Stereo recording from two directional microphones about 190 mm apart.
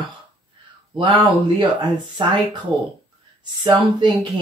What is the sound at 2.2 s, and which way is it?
Speech, 25° right (ahead or behind).